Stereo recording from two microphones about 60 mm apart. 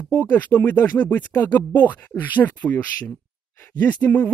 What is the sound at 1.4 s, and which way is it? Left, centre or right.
Speech, left.